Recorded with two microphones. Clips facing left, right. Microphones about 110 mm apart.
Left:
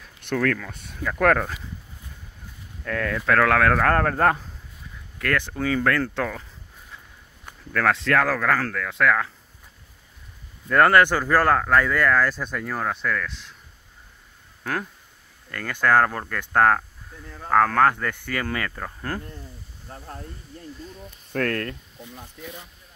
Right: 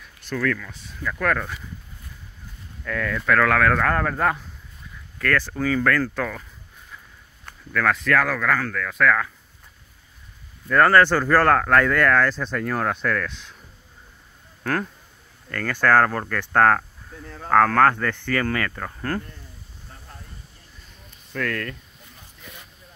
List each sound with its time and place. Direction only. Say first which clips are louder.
0.2 s speech: left 2 dB; 60° left (ahead or behind)
2.8 s speech: even; 40° left (ahead or behind)
3.3 s speech: even; 25° left (ahead or behind)
3.8 s speech: left 2 dB; 45° left (ahead or behind)
5.2 s speech: right 2 dB; 20° left (ahead or behind)
7.7 s speech: even; 30° left (ahead or behind)
8.7 s speech: right 1 dB; 25° left (ahead or behind)
10.7 s speech: right 1 dB; 20° left (ahead or behind); by 13.6 s centre (ahead or behind)
14.6 s speech: right 3 dB; 10° left (ahead or behind)
19.9 s a sound: left 8 dB; 40° left (ahead or behind)
21.3 s speech: left 2 dB; 40° left (ahead or behind)